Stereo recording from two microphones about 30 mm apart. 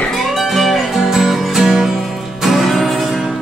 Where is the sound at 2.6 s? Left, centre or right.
Centre.